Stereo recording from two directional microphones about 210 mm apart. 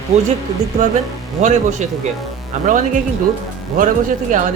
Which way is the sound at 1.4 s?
35° right (ahead or behind).